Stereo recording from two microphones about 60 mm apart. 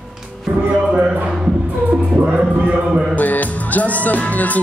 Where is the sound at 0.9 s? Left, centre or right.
Centre.